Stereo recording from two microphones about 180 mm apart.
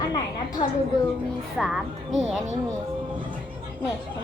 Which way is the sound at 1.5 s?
Centre (ahead or behind).